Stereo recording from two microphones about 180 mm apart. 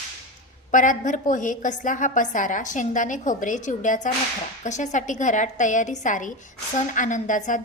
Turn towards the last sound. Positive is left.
turn(degrees=45)  # may be behind; listen again after turning